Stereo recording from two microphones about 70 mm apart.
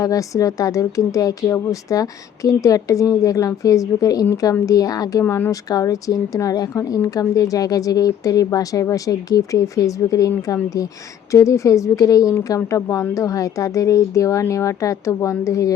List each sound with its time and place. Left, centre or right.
0.0 s a woman's voice: left